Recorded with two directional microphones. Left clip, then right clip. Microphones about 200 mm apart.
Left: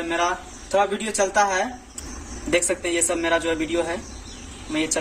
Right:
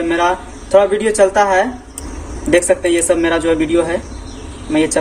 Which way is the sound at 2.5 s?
5° left (ahead or behind).